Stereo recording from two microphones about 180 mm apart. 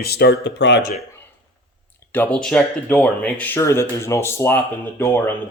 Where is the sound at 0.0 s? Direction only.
60° left (ahead or behind).